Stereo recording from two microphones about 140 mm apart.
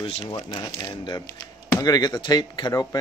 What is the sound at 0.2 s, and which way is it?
Speech, 30° left (ahead or behind).